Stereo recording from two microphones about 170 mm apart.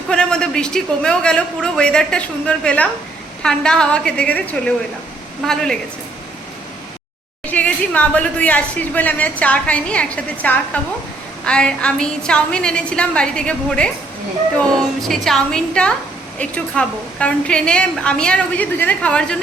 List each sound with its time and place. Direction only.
0.1 s a man's voice: 5° left (ahead or behind)
7.4 s a woman's voice: 10° left (ahead or behind)